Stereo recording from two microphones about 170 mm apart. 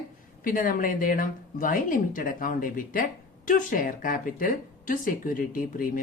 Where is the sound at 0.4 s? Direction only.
55° left (ahead or behind).